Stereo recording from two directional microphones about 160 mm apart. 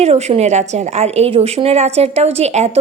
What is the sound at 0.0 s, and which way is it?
A woman's voice, 40° right (ahead or behind).